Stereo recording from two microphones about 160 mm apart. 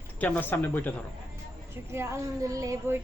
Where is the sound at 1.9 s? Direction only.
15° right (ahead or behind).